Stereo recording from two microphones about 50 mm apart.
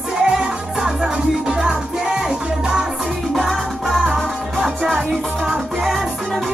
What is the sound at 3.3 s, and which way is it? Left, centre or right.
Music, centre.